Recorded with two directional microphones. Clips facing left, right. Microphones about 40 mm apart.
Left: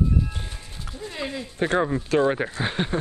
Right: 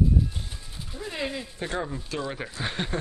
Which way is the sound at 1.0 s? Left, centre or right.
Centre.